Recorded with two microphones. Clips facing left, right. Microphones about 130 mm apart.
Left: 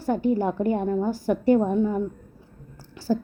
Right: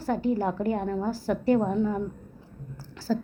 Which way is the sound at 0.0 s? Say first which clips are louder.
Left 3 dB; 20° left (ahead or behind).